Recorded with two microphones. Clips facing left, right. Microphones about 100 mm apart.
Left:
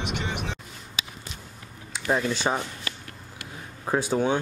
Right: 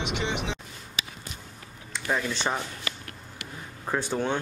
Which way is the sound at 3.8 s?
10° left (ahead or behind).